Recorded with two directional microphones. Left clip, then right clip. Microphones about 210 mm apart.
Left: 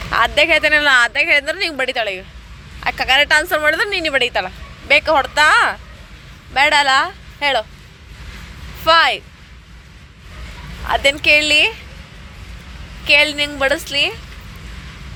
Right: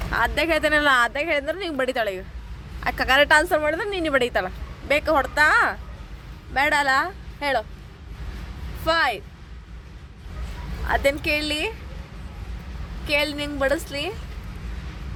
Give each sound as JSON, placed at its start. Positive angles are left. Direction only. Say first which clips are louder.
{"t": 0.1, "sound": "a woman's voice", "louder": "left 8 dB", "side_deg": -5}
{"t": 3.5, "sound": "a woman's voice", "louder": "left 7 dB", "side_deg": -5}
{"t": 4.0, "sound": "a woman's voice", "louder": "left 5 dB", "side_deg": -20}
{"t": 8.8, "sound": "speech", "louder": "left 9 dB", "side_deg": 0}
{"t": 10.8, "sound": "a woman's voice", "louder": "left 8 dB", "side_deg": -5}
{"t": 13.1, "sound": "a woman's voice", "louder": "left 10 dB", "side_deg": 0}